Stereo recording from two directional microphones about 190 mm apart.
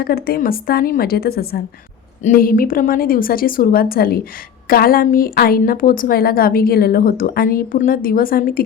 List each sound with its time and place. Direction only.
0.0 s a woman's voice: 50° left (ahead or behind)